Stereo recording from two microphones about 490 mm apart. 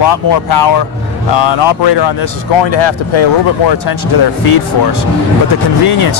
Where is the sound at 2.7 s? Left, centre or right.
Left.